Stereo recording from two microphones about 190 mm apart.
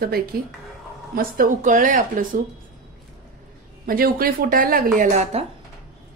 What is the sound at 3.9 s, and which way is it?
A woman's voice, 50° right (ahead or behind).